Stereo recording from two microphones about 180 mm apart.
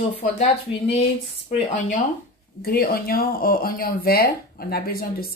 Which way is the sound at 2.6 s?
55° left (ahead or behind).